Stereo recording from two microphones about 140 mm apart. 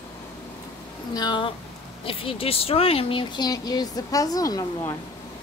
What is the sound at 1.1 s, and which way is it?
Speech, 30° left (ahead or behind).